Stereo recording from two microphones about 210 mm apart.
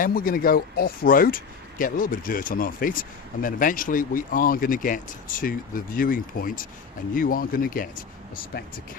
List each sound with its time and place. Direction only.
0.0 s speech: 45° left (ahead or behind)